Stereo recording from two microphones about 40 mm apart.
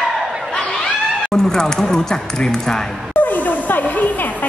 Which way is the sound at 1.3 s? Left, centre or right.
Centre.